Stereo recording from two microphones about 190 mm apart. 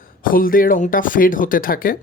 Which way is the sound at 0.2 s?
50° left (ahead or behind).